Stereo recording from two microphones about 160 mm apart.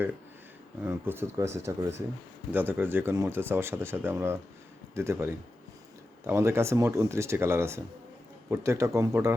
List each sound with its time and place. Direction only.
0.9 s speech: 15° right (ahead or behind)